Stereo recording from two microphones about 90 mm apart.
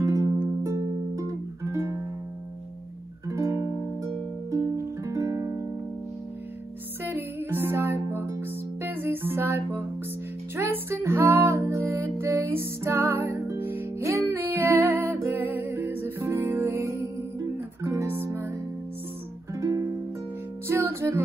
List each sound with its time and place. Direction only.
0.0 s music: 35° right (ahead or behind)
3.3 s music: 35° right (ahead or behind)
5.0 s music: 35° right (ahead or behind)
7.1 s music: 25° right (ahead or behind)
19.5 s music: 35° right (ahead or behind)